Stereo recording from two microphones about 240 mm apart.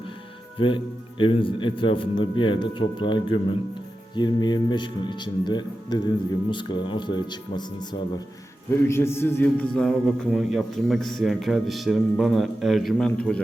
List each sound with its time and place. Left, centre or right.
0.6 s a man's voice: left; by 13.4 s centre